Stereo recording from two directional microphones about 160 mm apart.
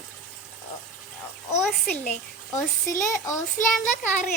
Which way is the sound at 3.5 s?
50° left (ahead or behind).